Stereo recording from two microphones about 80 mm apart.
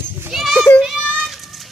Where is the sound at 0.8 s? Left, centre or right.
Centre.